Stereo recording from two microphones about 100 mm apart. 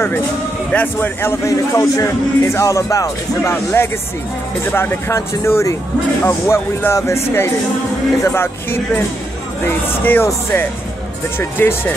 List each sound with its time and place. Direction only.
0.7 s a man's voice: 15° left (ahead or behind)
8.2 s a man's voice: 20° left (ahead or behind)